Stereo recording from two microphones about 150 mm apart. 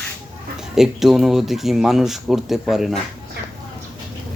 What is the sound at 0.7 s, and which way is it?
Speech, centre (ahead or behind).